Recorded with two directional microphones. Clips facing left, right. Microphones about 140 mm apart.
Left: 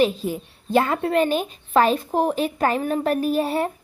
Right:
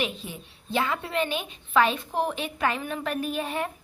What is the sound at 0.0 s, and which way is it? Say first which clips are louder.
A woman's voice: left 11 dB; 40° left (ahead or behind).